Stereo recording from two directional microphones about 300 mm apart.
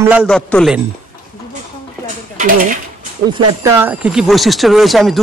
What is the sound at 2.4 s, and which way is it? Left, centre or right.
Speech, right.